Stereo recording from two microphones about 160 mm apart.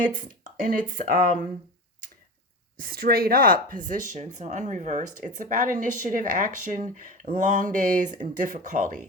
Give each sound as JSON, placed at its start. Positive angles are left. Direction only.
{"t": 0.0, "sound": "speech", "side_deg": -60}
{"t": 2.7, "sound": "speech", "side_deg": -65}